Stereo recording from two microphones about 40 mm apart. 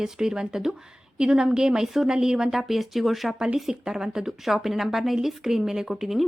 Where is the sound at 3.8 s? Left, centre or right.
Centre.